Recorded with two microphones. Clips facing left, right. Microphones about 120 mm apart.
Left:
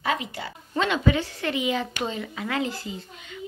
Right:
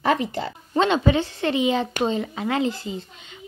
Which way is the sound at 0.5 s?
30° right (ahead or behind).